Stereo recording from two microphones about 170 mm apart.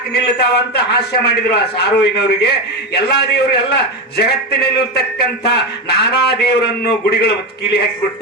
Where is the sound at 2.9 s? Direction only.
75° left (ahead or behind).